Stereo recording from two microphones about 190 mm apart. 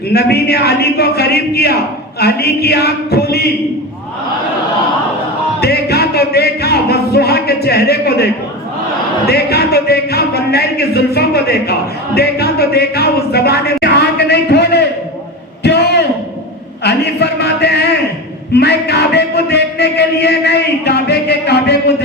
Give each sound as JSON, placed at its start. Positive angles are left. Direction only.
{"t": 0.1, "sound": "speech", "side_deg": 55}
{"t": 5.5, "sound": "music", "side_deg": 55}
{"t": 9.2, "sound": "speech", "side_deg": 55}
{"t": 15.6, "sound": "a sound", "side_deg": 60}
{"t": 16.8, "sound": "speech", "side_deg": 60}